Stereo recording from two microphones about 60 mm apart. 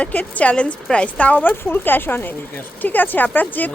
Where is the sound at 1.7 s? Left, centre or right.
Left.